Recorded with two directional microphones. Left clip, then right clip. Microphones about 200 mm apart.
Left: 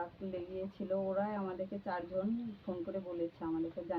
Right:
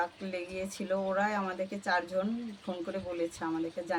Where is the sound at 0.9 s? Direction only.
35° right (ahead or behind).